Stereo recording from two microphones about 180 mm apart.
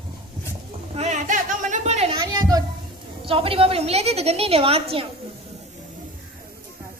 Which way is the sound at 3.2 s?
30° right (ahead or behind).